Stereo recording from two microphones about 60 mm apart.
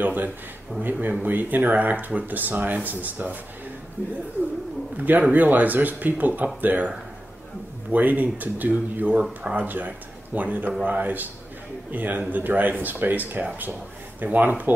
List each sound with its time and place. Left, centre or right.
0.0 s speech: right
7.9 s speech: right